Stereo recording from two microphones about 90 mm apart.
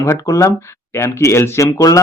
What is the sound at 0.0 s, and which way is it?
Speech, 35° left (ahead or behind).